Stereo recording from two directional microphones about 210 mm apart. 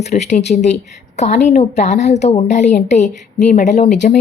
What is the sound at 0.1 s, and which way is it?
A woman's voice, 30° left (ahead or behind).